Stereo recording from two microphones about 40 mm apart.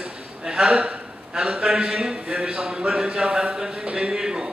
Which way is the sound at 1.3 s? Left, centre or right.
Right.